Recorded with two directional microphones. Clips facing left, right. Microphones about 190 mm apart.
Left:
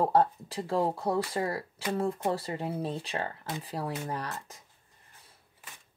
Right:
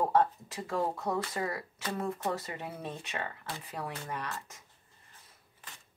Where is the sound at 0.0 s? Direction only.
30° left (ahead or behind).